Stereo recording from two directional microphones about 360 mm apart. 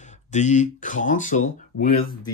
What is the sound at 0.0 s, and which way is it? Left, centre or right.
Speech, centre.